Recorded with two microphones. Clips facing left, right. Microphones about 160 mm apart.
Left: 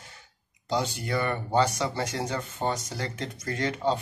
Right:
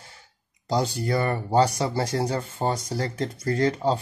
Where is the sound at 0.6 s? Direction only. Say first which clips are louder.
Right 4 dB; 35° right (ahead or behind).